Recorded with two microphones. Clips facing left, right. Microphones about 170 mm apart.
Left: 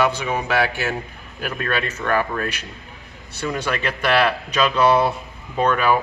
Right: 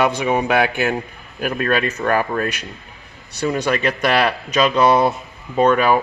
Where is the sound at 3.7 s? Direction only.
10° right (ahead or behind).